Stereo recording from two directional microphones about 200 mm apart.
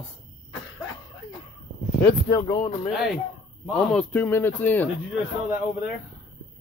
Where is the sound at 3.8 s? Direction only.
5° left (ahead or behind).